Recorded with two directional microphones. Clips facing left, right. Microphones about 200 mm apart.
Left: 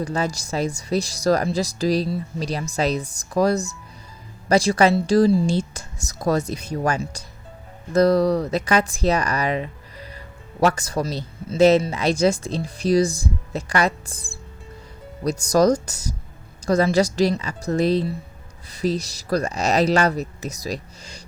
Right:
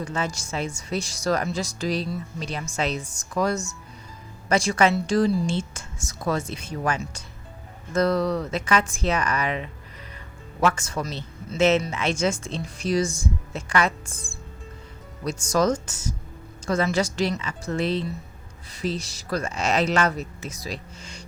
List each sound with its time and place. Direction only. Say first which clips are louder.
0.0 s speech: left 4 dB; 35° left (ahead or behind)